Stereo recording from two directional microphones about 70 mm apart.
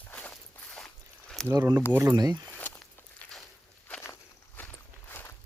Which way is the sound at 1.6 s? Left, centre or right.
Right.